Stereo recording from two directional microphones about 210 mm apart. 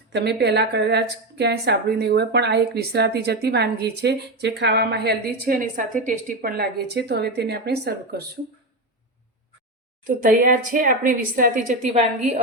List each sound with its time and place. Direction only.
0.1 s speech: 55° right (ahead or behind)
10.0 s a woman's voice: 40° right (ahead or behind)